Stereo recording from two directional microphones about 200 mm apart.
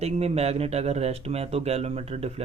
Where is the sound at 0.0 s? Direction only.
30° right (ahead or behind).